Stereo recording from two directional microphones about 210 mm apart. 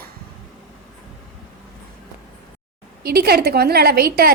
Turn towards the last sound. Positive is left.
turn(degrees=-45)  # may be behind; listen again after turning